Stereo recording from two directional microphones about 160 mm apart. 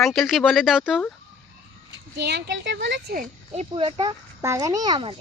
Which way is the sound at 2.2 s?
90° right.